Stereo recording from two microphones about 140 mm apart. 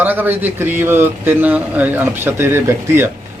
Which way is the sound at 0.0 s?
15° right (ahead or behind).